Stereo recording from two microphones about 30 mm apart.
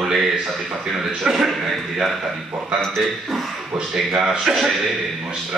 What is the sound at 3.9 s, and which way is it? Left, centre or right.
Speech, centre.